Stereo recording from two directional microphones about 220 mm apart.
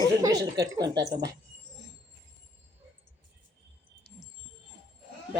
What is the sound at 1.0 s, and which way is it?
Speech, 45° right (ahead or behind).